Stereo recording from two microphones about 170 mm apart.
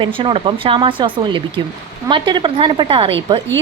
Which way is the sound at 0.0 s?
30° right (ahead or behind).